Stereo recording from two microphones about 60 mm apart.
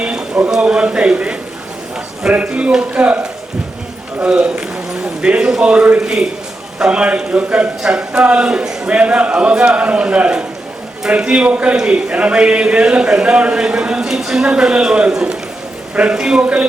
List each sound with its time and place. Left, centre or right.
0.0 s a sound: centre
0.6 s a man's voice: centre
4.2 s a man's voice: centre